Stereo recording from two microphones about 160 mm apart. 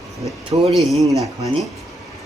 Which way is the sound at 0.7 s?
Centre (ahead or behind).